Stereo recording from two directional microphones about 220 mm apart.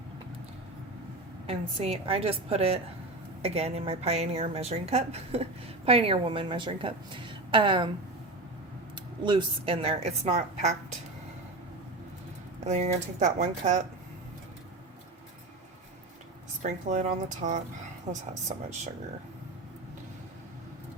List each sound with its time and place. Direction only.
1.5 s a woman's voice: 25° right (ahead or behind)
9.2 s a woman's voice: 20° right (ahead or behind)
12.6 s speech: 30° right (ahead or behind)
16.6 s speech: 35° right (ahead or behind)